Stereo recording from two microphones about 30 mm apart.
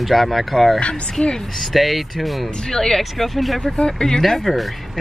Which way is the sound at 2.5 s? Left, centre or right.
Centre.